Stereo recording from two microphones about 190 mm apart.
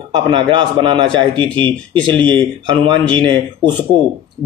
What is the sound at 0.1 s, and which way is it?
Speech, 25° right (ahead or behind).